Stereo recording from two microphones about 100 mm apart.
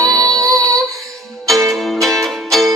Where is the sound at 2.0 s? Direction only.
Centre (ahead or behind).